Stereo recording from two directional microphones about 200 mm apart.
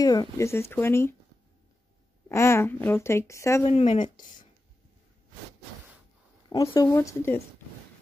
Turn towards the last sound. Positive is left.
turn(degrees=15)  # may be behind; listen again after turning